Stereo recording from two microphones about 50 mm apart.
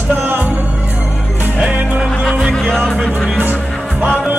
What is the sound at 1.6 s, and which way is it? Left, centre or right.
Music, right.